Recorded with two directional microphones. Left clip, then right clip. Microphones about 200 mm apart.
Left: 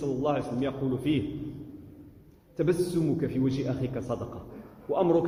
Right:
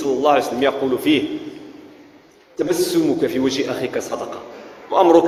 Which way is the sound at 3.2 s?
40° right (ahead or behind).